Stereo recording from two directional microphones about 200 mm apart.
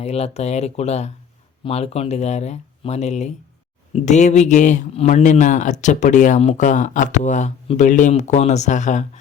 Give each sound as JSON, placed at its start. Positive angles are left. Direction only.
{"t": 0.0, "sound": "a man's voice", "side_deg": 30}